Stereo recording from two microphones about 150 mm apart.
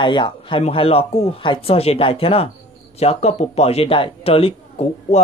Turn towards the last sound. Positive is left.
turn(degrees=40)  # may be behind; listen again after turning